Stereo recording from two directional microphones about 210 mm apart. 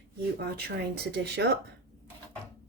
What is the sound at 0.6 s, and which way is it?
Speech, 50° right (ahead or behind).